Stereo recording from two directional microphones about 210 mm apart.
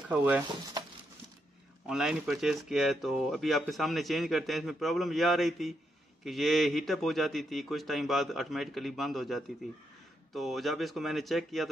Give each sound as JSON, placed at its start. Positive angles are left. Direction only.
{"t": 0.1, "sound": "speech", "side_deg": -5}
{"t": 0.8, "sound": "a sound", "side_deg": -20}
{"t": 1.9, "sound": "speech", "side_deg": -5}